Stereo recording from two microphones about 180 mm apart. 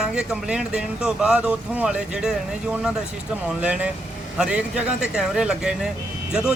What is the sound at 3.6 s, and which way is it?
Speech, 5° right (ahead or behind).